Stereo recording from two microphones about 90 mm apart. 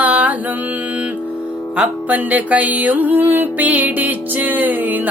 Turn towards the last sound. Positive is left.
turn(degrees=-20)  # may be behind; listen again after turning